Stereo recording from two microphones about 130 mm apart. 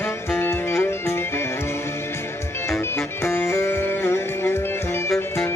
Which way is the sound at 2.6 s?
20° left (ahead or behind).